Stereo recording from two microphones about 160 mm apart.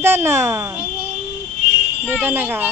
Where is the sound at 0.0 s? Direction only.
15° right (ahead or behind).